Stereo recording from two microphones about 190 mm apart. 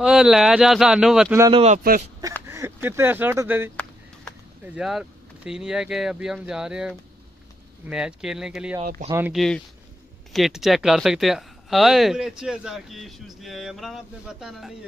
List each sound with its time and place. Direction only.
0.0 s speech: 5° right (ahead or behind)
1.5 s speech: 35° right (ahead or behind)
1.8 s speech: 50° right (ahead or behind)
2.4 s speech: 15° right (ahead or behind)
4.7 s speech: 5° right (ahead or behind)